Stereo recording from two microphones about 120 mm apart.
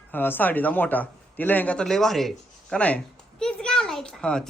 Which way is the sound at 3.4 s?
5° left (ahead or behind).